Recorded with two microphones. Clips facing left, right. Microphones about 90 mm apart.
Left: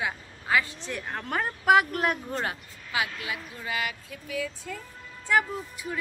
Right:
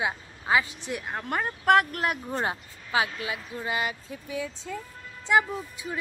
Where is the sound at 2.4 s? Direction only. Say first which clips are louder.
Right 3 dB; 30° right (ahead or behind).